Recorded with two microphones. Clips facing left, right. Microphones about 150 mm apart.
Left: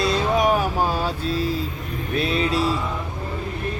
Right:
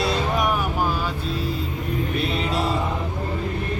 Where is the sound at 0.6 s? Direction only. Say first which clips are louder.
Left 2 dB; 30° left (ahead or behind).